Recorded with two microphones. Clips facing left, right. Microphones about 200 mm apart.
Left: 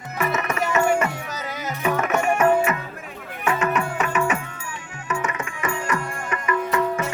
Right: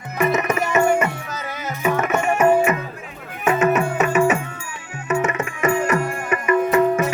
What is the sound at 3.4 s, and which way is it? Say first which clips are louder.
Music: right 5 dB; 20° right (ahead or behind).